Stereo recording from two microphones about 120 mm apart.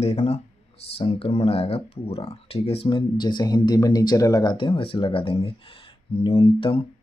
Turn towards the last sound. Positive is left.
turn(degrees=50)  # may be behind; listen again after turning